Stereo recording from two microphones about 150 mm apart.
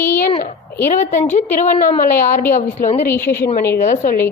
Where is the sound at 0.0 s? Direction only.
15° left (ahead or behind).